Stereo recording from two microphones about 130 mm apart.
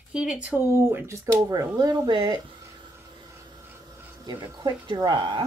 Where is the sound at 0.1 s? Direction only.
5° right (ahead or behind); by 2.4 s 35° right (ahead or behind).